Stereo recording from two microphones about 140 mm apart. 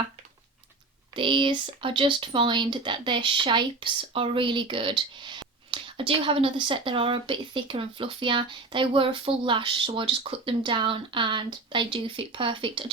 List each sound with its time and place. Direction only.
1.1 s speech: 35° right (ahead or behind)